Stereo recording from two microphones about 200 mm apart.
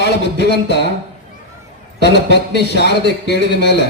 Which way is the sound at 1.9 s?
60° left (ahead or behind).